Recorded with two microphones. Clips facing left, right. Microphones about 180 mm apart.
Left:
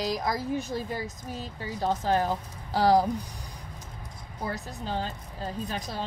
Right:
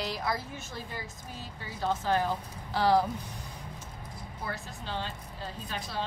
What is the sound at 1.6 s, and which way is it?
Speech, 40° left (ahead or behind).